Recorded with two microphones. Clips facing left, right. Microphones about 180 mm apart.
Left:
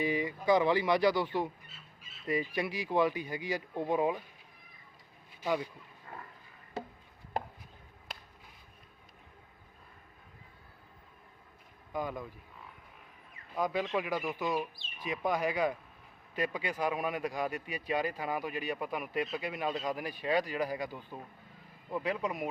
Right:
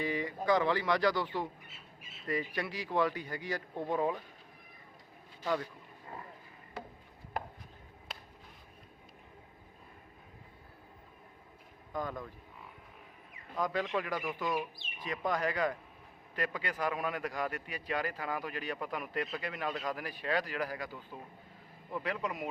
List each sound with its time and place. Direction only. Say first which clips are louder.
0.0 s speech: left 3 dB; 15° left (ahead or behind)
5.4 s speech: left 1 dB; 10° left (ahead or behind)
6.8 s a sound: left 4 dB; 25° left (ahead or behind)
7.3 s chopping: left 3 dB; 25° left (ahead or behind)
11.9 s speech: left 2 dB; 10° left (ahead or behind)
13.6 s speech: left 1 dB; 15° left (ahead or behind)